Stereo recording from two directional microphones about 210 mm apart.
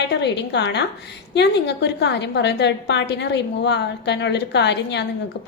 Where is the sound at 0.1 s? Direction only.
55° left (ahead or behind).